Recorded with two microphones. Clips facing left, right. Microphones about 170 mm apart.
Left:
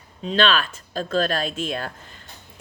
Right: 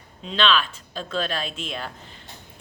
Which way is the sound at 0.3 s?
45° left (ahead or behind).